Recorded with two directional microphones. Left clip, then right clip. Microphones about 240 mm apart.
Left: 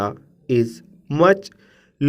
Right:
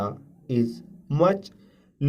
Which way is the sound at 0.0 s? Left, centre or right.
Left.